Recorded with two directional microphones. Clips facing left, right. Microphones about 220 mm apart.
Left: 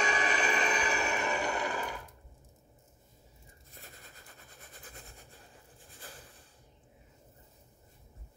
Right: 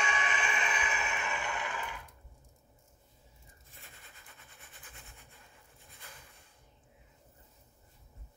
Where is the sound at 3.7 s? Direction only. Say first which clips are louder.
Left 5 dB; 40° left (ahead or behind).